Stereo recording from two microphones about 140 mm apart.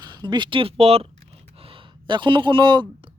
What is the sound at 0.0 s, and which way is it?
Speech, 30° right (ahead or behind).